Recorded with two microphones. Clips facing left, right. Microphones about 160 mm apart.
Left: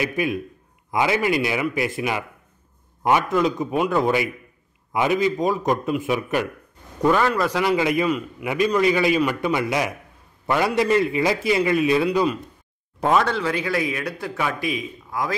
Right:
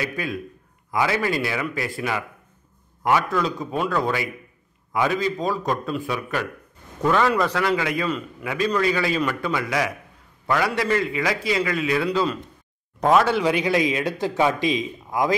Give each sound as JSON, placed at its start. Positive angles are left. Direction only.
{"t": 0.0, "sound": "a man's voice", "side_deg": 20}
{"t": 7.0, "sound": "a man's voice", "side_deg": 10}
{"t": 7.6, "sound": "a man's voice", "side_deg": 20}
{"t": 13.0, "sound": "speech", "side_deg": 0}
{"t": 13.4, "sound": "a man's voice", "side_deg": -15}